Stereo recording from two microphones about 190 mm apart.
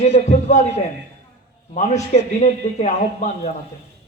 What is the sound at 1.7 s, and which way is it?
A man's voice, 40° left (ahead or behind).